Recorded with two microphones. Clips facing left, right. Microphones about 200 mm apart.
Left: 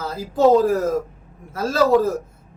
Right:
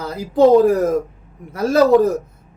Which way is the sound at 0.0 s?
20° right (ahead or behind).